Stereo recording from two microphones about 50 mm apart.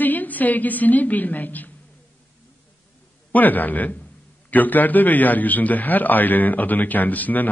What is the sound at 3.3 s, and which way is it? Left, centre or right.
A man's voice, left.